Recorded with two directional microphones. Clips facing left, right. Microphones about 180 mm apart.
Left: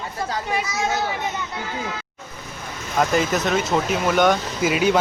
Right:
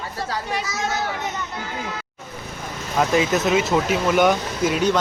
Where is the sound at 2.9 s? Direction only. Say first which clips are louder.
Right 1 dB; centre (ahead or behind).